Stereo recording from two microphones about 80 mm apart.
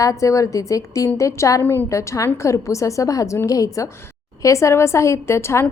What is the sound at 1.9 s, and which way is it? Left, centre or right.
A woman's voice, left.